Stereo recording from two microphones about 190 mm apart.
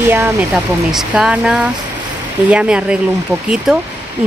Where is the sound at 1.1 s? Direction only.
5° right (ahead or behind).